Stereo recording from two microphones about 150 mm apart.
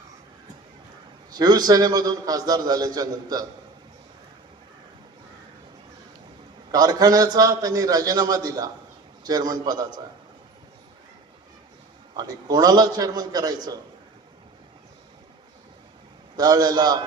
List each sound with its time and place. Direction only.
1.3 s a man's voice: 25° right (ahead or behind)
6.7 s a man's voice: 25° right (ahead or behind)
12.1 s a man's voice: 25° right (ahead or behind)
16.4 s a man's voice: 25° right (ahead or behind)